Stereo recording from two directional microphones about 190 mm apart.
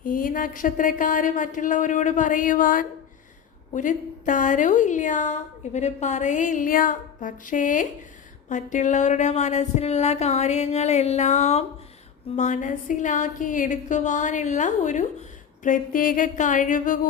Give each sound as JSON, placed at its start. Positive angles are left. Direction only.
{"t": 0.0, "sound": "a woman's voice", "side_deg": 45}